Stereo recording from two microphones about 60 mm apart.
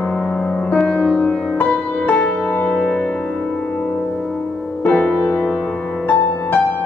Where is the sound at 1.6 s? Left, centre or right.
Left.